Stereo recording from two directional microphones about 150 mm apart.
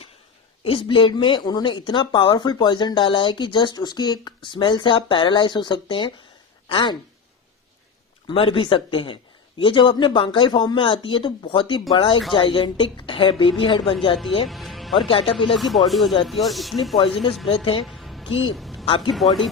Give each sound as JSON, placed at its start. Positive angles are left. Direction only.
{"t": 0.6, "sound": "speech", "side_deg": 35}
{"t": 8.3, "sound": "speech", "side_deg": 35}
{"t": 14.4, "sound": "music", "side_deg": 0}
{"t": 14.9, "sound": "speech", "side_deg": 35}
{"t": 15.5, "sound": "speech", "side_deg": 0}
{"t": 17.4, "sound": "speech", "side_deg": 40}
{"t": 17.8, "sound": "music", "side_deg": 0}
{"t": 18.5, "sound": "a sound", "side_deg": 0}
{"t": 18.9, "sound": "speech", "side_deg": 35}
{"t": 19.1, "sound": "speech", "side_deg": 0}